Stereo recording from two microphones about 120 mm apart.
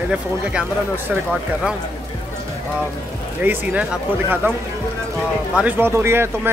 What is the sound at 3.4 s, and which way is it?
Speech, 15° right (ahead or behind).